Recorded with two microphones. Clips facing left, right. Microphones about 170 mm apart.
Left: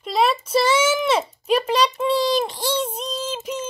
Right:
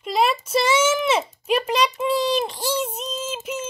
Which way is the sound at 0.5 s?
30° left (ahead or behind).